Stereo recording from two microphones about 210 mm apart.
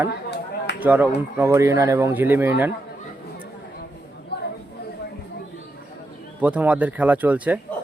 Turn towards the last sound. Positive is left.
turn(degrees=-5)  # may be behind; listen again after turning